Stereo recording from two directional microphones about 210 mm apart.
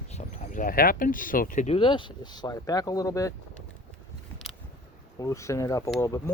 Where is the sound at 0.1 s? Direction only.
30° left (ahead or behind); by 3.3 s 15° left (ahead or behind).